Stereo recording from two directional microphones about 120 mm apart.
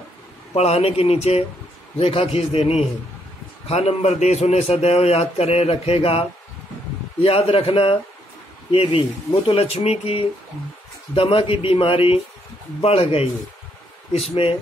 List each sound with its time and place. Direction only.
0.6 s a man's voice: 60° left (ahead or behind)
11.1 s a man's voice: 45° left (ahead or behind)